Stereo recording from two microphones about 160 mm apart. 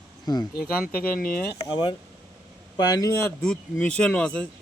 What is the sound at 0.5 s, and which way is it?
Speech, 70° left (ahead or behind).